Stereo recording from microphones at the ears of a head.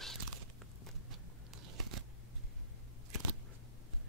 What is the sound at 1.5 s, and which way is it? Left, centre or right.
Scissors, right.